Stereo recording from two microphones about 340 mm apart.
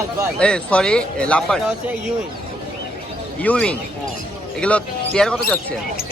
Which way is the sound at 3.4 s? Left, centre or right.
Centre.